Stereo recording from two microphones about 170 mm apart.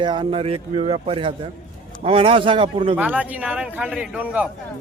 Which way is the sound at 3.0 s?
10° right (ahead or behind).